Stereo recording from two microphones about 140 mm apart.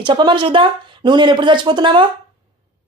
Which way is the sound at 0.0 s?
35° right (ahead or behind).